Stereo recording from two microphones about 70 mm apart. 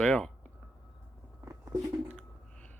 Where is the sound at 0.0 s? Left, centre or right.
Centre.